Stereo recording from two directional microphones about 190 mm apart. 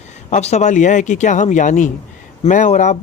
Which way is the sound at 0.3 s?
35° left (ahead or behind).